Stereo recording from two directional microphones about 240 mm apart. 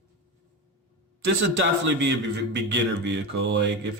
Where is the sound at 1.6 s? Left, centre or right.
Right.